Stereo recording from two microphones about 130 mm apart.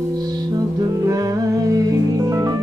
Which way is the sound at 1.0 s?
25° right (ahead or behind).